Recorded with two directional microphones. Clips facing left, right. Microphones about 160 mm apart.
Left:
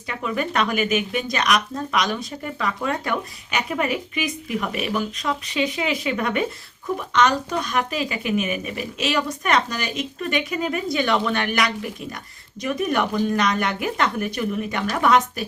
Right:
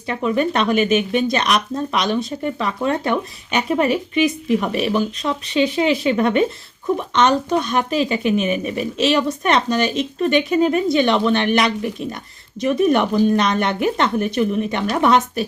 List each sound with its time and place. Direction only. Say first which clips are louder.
0.1 s speech: right 6 dB; 25° right (ahead or behind)